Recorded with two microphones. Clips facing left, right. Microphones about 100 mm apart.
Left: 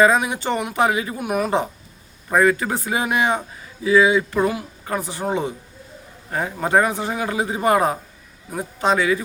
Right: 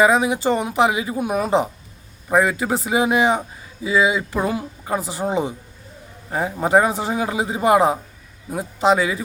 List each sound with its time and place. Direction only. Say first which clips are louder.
0.0 s a woman's voice: right 1 dB; 15° right (ahead or behind)